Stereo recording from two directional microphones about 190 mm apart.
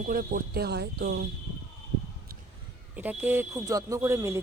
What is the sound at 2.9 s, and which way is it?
Speech, 10° right (ahead or behind).